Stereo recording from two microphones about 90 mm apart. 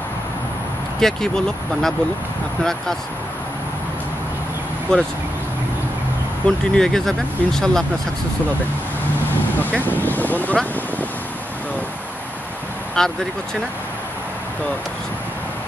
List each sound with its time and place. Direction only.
1.0 s speech: 5° left (ahead or behind)
4.9 s speech: 10° left (ahead or behind)
6.4 s speech: 5° left (ahead or behind)
9.8 s speech: 20° left (ahead or behind)
12.9 s speech: 5° left (ahead or behind)